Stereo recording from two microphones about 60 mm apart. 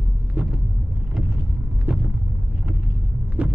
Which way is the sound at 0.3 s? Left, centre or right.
Centre.